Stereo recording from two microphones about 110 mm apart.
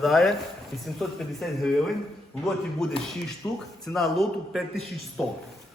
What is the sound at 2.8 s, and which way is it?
Speech, 5° left (ahead or behind).